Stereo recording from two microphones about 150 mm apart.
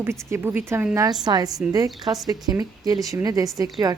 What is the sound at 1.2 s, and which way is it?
Speech, 25° right (ahead or behind).